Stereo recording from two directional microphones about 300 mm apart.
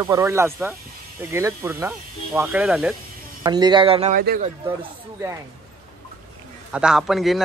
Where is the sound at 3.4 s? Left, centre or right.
Centre.